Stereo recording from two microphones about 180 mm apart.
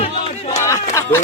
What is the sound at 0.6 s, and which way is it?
Speech, 15° left (ahead or behind).